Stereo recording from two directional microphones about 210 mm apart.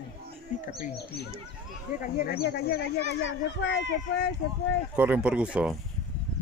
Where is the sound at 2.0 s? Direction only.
45° left (ahead or behind).